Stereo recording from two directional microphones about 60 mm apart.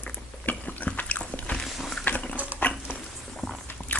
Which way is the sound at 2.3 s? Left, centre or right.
Right.